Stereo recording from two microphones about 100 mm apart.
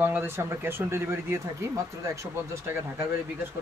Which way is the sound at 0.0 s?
20° right (ahead or behind).